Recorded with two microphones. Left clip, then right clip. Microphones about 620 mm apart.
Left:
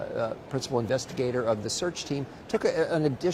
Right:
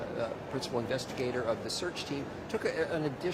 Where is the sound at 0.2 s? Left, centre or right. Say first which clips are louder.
Left 5 dB; left.